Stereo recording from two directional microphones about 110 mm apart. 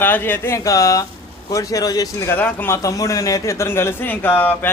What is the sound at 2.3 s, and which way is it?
Speech, 15° left (ahead or behind).